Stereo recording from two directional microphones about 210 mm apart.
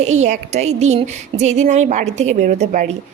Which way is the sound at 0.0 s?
30° right (ahead or behind).